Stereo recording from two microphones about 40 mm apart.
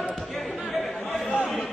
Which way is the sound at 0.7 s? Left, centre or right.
Centre.